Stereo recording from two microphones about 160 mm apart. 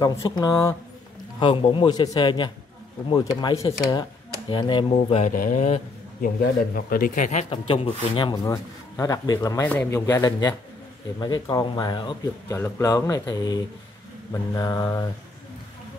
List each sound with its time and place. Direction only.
0.0 s speech: 20° left (ahead or behind)
1.4 s a man's voice: 30° left (ahead or behind)
5.2 s speech: 55° left (ahead or behind)
6.2 s speech: 65° left (ahead or behind); by 9.7 s 20° left (ahead or behind)
9.7 s speech: 10° left (ahead or behind)
9.9 s speech: 20° left (ahead or behind)
12.5 s speech: 15° left (ahead or behind)